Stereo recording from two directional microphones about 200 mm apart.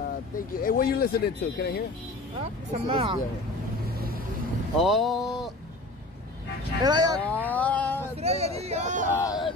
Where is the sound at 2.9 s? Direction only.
25° right (ahead or behind).